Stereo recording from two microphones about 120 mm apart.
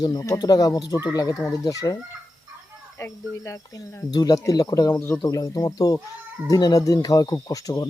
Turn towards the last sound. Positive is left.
turn(degrees=30)  # may be behind; listen again after turning